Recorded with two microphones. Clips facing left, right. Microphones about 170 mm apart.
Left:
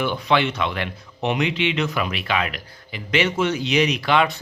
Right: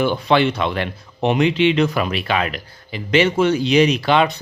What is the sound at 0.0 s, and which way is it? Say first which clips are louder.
Speech: right 4 dB; 35° right (ahead or behind).